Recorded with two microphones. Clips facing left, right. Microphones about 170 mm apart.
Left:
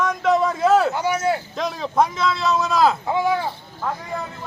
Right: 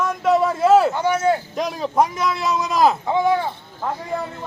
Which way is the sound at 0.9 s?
10° left (ahead or behind).